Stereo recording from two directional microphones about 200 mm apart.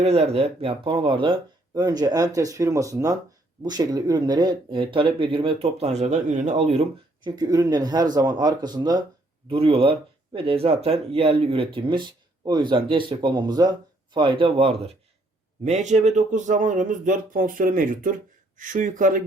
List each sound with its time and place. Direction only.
0.0 s speech: 30° right (ahead or behind)
7.3 s speech: 20° right (ahead or behind); by 19.2 s 40° right (ahead or behind)